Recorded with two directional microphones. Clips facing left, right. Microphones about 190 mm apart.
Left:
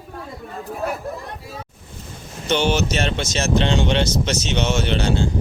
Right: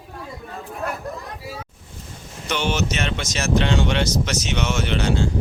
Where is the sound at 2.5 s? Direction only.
30° left (ahead or behind).